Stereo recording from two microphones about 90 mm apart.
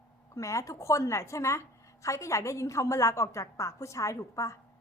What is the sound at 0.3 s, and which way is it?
A woman's voice, 35° left (ahead or behind).